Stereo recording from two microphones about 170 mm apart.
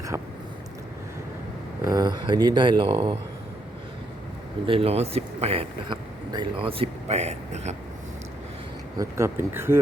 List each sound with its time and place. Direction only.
0.1 s speech: 20° right (ahead or behind)
1.8 s speech: 20° right (ahead or behind)
4.6 s a man's voice: 35° right (ahead or behind)
9.0 s speech: 15° right (ahead or behind)